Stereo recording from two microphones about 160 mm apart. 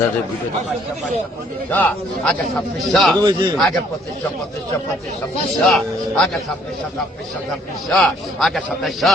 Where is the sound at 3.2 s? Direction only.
25° right (ahead or behind).